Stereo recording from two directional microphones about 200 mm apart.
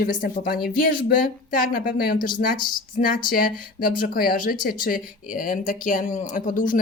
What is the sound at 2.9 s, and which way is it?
Speech, 45° left (ahead or behind).